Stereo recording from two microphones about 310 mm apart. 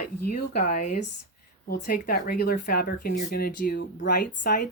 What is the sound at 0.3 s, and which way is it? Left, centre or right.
Speech, left.